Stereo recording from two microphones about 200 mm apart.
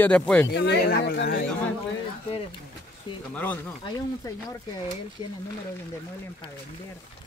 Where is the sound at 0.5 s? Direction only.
60° left (ahead or behind).